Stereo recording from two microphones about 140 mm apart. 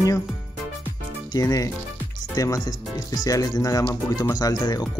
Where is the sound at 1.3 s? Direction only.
25° left (ahead or behind).